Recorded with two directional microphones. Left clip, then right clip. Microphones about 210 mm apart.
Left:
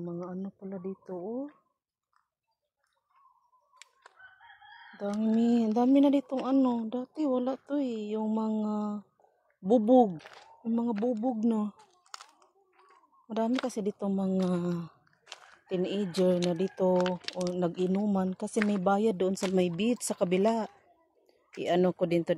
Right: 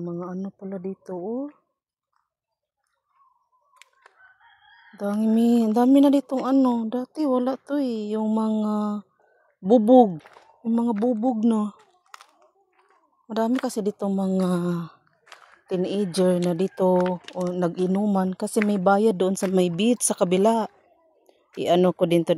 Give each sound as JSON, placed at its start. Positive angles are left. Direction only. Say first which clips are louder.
{"t": 0.0, "sound": "speech", "louder": "right 6 dB", "side_deg": -55}
{"t": 3.7, "sound": "a sound", "louder": "right 3 dB", "side_deg": -5}
{"t": 4.9, "sound": "a woman's voice", "louder": "right 7 dB", "side_deg": -55}
{"t": 10.1, "sound": "speech", "louder": "right 4 dB", "side_deg": -5}
{"t": 10.6, "sound": "a woman's voice", "louder": "right 7 dB", "side_deg": -45}
{"t": 12.2, "sound": "a sound", "louder": "right 2 dB", "side_deg": 0}
{"t": 13.3, "sound": "a woman's voice", "louder": "right 6 dB", "side_deg": -45}